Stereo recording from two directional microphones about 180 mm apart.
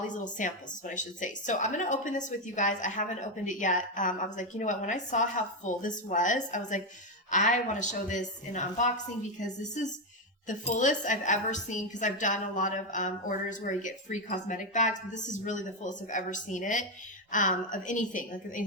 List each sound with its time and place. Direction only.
0.1 s speech: 45° left (ahead or behind)
10.4 s speech: 45° left (ahead or behind)